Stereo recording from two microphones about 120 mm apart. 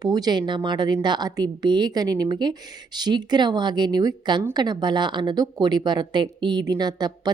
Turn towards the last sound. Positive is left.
turn(degrees=-35)  # may be behind; listen again after turning